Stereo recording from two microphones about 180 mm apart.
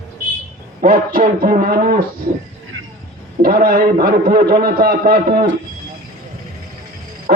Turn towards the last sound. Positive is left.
turn(degrees=-55)  # may be behind; listen again after turning